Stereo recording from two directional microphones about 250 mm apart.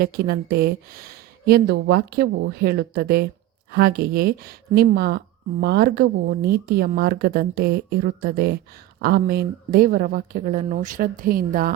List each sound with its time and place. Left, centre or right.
0.0 s speech: right